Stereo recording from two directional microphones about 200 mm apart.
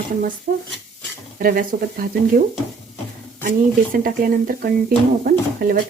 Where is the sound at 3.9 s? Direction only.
45° right (ahead or behind).